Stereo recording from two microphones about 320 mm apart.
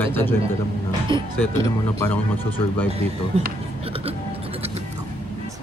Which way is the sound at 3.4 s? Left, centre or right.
Centre.